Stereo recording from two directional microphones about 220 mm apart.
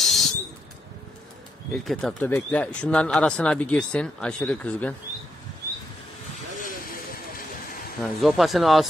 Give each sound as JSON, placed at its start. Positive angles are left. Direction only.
{"t": 0.0, "sound": "a sound", "side_deg": 0}
{"t": 1.7, "sound": "speech", "side_deg": 0}
{"t": 6.6, "sound": "vehicle", "side_deg": 40}
{"t": 8.0, "sound": "speech", "side_deg": 0}